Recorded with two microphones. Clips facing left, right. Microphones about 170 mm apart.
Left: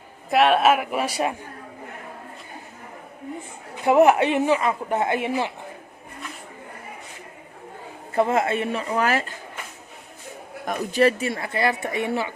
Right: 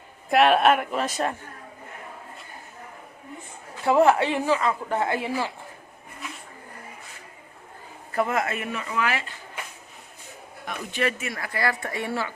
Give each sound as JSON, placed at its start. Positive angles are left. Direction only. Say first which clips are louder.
{"t": 0.3, "sound": "a man's voice", "louder": "left 1 dB", "side_deg": 0}
{"t": 3.8, "sound": "a woman's voice", "louder": "left 3 dB", "side_deg": 20}
{"t": 8.1, "sound": "a woman's voice", "louder": "left 4 dB", "side_deg": 25}
{"t": 10.7, "sound": "a woman's voice", "louder": "left 8 dB", "side_deg": 35}